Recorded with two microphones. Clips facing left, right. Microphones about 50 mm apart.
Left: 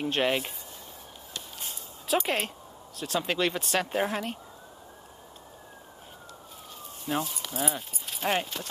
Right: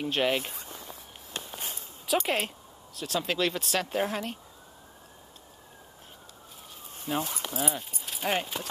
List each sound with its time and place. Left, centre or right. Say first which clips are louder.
0.0 s speech: even; centre
1.3 s a sound: right 3 dB; right
2.0 s speech: even; centre
7.1 s speech: even; centre